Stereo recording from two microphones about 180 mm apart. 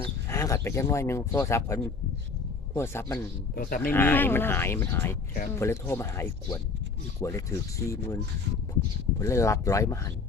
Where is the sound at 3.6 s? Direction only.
55° left (ahead or behind).